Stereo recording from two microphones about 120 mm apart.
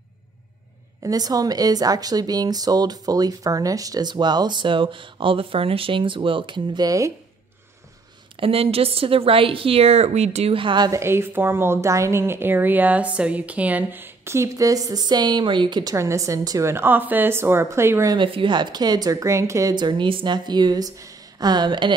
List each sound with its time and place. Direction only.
1.0 s speech: 30° right (ahead or behind)
8.4 s speech: 50° right (ahead or behind)
10.9 s a woman's voice: 20° right (ahead or behind)
18.1 s speech: 45° right (ahead or behind); by 19.7 s 25° right (ahead or behind)
19.7 s speech: 40° right (ahead or behind)